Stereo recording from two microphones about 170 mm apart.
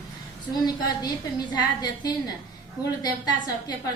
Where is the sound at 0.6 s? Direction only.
25° left (ahead or behind).